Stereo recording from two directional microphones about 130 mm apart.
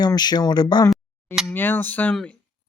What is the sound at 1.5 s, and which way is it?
Speech, 15° left (ahead or behind).